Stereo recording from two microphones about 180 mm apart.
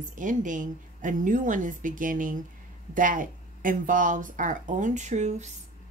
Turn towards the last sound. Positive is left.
turn(degrees=-40)  # may be behind; listen again after turning